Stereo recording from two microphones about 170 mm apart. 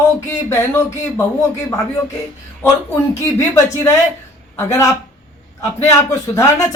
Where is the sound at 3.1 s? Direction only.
15° left (ahead or behind).